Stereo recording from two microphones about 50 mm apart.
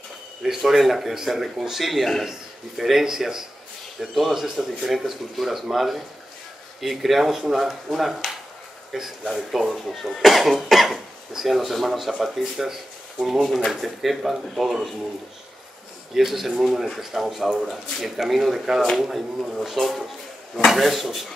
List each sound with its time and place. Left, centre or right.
0.6 s speech: centre
13.7 s speech: centre
16.2 s speech: centre